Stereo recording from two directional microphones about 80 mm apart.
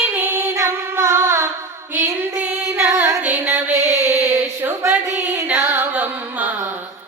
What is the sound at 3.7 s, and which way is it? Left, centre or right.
Chant, right.